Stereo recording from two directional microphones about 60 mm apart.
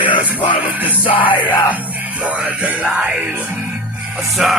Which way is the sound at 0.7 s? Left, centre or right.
Right.